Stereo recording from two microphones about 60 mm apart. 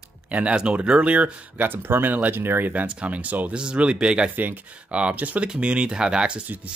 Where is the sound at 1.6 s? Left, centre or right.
Right.